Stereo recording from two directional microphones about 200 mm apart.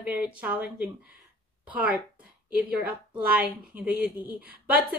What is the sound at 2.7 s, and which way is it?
A woman's voice, 5° right (ahead or behind).